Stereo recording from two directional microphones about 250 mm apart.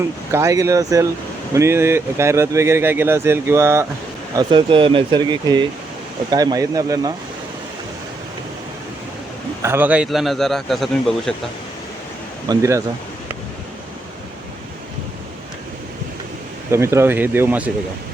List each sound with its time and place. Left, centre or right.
0.3 s speech: centre
9.6 s speech: centre
12.5 s speech: centre
16.7 s speech: centre